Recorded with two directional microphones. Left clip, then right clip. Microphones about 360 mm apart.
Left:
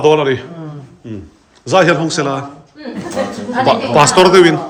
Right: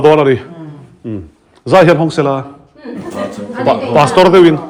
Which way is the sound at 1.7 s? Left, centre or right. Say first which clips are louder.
Right 3 dB; centre.